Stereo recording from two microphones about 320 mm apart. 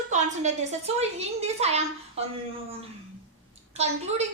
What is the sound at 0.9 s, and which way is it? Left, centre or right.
A woman's voice, centre.